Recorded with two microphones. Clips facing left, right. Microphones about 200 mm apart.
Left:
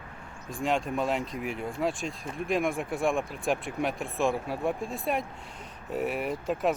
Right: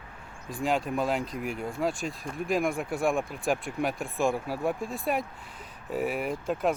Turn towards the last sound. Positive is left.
turn(degrees=0)  # may be behind; listen again after turning